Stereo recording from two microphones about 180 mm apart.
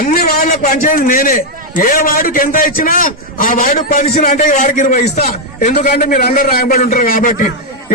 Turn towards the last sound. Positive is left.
turn(degrees=50)  # may be behind; listen again after turning